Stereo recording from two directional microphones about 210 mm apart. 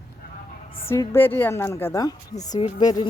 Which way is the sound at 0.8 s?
10° left (ahead or behind).